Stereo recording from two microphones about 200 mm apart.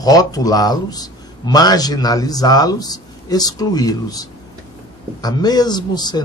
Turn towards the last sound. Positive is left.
turn(degrees=20)  # may be behind; listen again after turning